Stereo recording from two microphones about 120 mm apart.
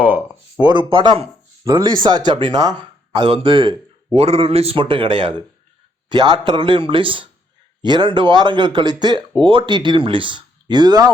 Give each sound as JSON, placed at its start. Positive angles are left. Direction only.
{"t": 0.6, "sound": "a man's voice", "side_deg": -40}
{"t": 4.2, "sound": "a man's voice", "side_deg": -55}